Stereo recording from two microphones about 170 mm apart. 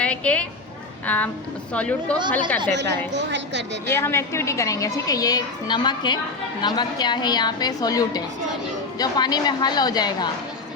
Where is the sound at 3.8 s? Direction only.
15° left (ahead or behind).